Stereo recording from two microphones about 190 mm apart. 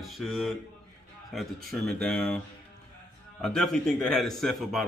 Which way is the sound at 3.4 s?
5° left (ahead or behind).